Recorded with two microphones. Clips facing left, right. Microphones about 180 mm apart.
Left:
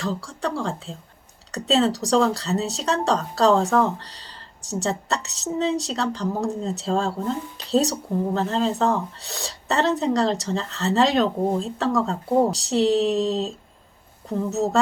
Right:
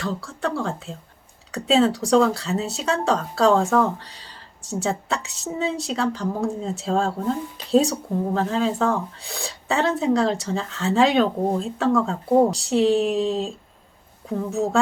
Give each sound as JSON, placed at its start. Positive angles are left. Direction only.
{"t": 0.0, "sound": "speech", "side_deg": -5}